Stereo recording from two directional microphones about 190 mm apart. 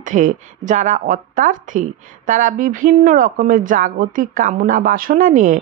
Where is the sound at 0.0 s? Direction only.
45° right (ahead or behind).